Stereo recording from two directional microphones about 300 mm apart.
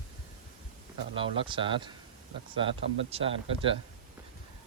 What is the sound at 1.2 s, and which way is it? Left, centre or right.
Speech, centre.